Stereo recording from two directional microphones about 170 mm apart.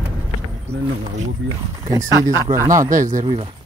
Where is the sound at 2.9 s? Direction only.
50° right (ahead or behind).